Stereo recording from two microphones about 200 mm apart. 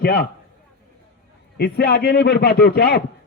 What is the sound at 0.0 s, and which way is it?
Speech, 50° left (ahead or behind).